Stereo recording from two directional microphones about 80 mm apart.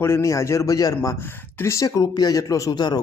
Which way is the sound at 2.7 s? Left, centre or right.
Left.